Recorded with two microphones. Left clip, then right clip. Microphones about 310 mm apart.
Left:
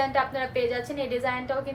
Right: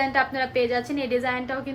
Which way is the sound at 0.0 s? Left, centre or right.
Right.